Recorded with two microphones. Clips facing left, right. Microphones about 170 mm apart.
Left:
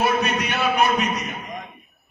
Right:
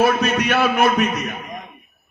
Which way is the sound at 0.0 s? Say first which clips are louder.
Right 4 dB; 90° right.